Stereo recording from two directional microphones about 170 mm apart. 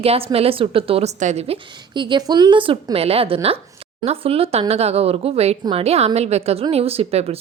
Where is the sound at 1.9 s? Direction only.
25° right (ahead or behind).